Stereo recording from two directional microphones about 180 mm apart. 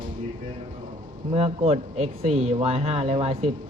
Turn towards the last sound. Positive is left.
turn(degrees=-35)  # may be behind; listen again after turning